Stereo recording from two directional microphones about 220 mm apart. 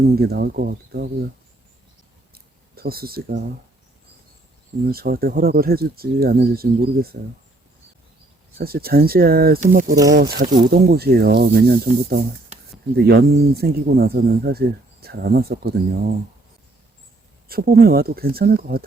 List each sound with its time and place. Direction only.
0.2 s speech: 45° right (ahead or behind)
2.3 s a sound: 45° right (ahead or behind)
4.9 s speech: 45° right (ahead or behind)
8.5 s speech: 45° right (ahead or behind)
9.9 s speech: 15° right (ahead or behind)
10.2 s speech: 45° right (ahead or behind)
17.5 s speech: 45° right (ahead or behind)